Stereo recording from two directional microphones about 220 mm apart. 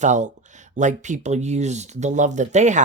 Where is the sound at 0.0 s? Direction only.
35° right (ahead or behind).